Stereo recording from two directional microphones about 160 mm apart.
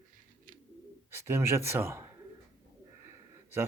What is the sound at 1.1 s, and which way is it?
Speech, 15° right (ahead or behind).